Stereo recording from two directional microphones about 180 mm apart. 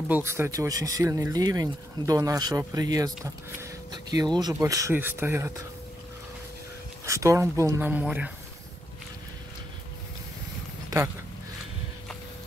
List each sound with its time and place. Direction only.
0.1 s speech: 15° right (ahead or behind)
7.1 s speech: 15° right (ahead or behind)